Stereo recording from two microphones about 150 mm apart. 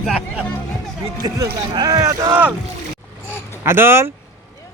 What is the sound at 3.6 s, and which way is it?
Speech, 15° right (ahead or behind).